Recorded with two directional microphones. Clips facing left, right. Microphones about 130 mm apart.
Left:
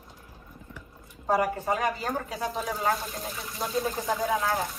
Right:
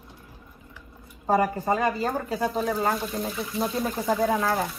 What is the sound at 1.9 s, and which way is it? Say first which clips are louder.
Speech: right 4 dB; 35° right (ahead or behind).